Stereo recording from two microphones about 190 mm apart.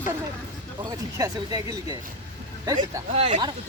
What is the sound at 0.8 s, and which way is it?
Speech, 20° right (ahead or behind).